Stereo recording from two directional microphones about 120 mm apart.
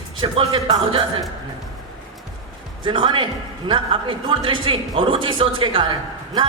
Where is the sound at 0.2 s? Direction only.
45° right (ahead or behind).